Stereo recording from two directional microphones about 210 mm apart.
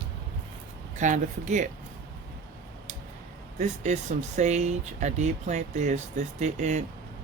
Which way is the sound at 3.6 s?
35° right (ahead or behind).